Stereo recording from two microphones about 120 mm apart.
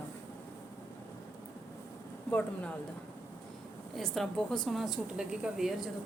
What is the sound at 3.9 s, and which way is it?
A woman's voice, centre (ahead or behind).